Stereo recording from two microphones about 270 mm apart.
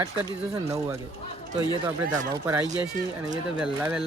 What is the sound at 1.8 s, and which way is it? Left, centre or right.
Speech, centre.